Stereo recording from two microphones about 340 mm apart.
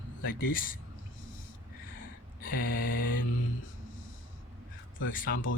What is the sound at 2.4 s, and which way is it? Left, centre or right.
Speech, left.